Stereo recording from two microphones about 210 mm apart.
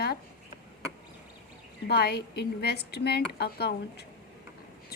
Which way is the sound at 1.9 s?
50° left (ahead or behind).